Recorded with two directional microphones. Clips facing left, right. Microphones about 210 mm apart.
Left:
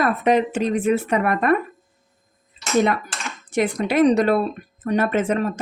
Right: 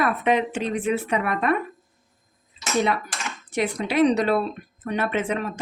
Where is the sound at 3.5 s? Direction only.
50° left (ahead or behind).